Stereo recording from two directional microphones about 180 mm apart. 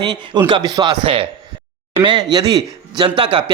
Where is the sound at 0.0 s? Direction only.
25° right (ahead or behind).